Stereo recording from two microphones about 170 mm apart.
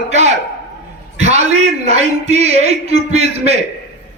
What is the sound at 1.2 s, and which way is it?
A man's voice, 40° right (ahead or behind).